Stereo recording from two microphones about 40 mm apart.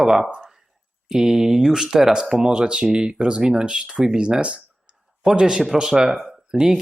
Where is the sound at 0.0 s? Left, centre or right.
Centre.